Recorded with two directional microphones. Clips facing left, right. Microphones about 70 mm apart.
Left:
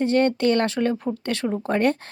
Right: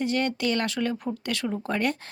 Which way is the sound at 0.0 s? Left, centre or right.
Left.